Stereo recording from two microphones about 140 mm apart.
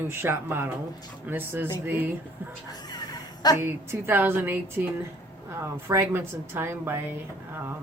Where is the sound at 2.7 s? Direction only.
30° left (ahead or behind).